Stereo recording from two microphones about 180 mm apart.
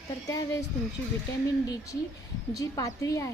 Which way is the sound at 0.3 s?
20° left (ahead or behind).